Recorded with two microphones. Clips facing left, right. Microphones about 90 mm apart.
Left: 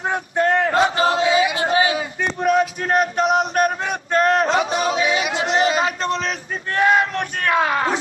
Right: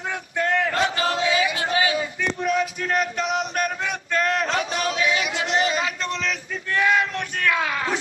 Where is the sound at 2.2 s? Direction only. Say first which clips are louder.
Left 7 dB; 45° left (ahead or behind).